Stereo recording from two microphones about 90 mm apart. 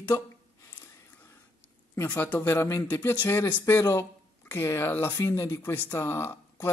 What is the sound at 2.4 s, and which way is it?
Speech, 30° left (ahead or behind).